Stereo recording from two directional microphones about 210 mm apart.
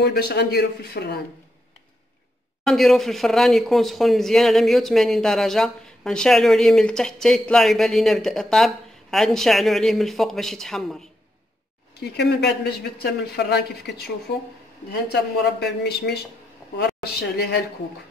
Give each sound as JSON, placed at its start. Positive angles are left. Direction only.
{"t": 0.0, "sound": "a woman's voice", "side_deg": 50}
{"t": 2.6, "sound": "speech", "side_deg": 0}
{"t": 11.9, "sound": "a woman's voice", "side_deg": 50}
{"t": 15.6, "sound": "a woman's voice", "side_deg": 55}